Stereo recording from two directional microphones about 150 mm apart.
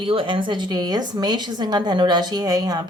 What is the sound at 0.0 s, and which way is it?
A woman's voice, 35° right (ahead or behind).